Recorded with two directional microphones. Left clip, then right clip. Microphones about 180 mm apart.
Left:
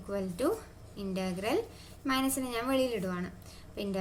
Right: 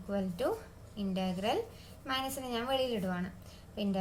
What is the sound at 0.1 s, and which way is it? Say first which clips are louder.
Speech: left 2 dB; 35° left (ahead or behind).